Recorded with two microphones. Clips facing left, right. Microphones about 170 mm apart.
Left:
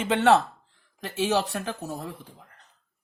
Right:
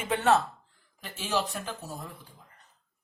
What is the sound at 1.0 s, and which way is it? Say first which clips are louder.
Speech: left 6 dB; 70° left (ahead or behind).